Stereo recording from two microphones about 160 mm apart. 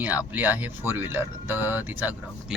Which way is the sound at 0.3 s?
10° right (ahead or behind).